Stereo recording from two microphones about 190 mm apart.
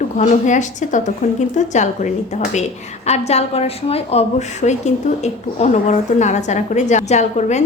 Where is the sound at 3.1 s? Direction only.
35° left (ahead or behind).